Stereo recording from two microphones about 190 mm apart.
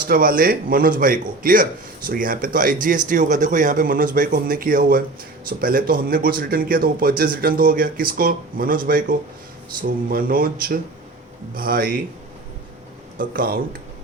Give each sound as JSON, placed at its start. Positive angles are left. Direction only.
{"t": 0.1, "sound": "speech", "side_deg": -50}
{"t": 13.1, "sound": "speech", "side_deg": -50}